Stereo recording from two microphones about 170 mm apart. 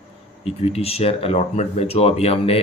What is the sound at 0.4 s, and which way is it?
Speech, 35° left (ahead or behind).